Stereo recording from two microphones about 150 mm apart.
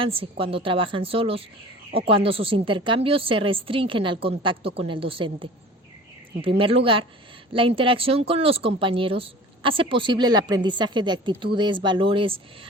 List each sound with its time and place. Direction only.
0.0 s a woman's voice: 35° right (ahead or behind)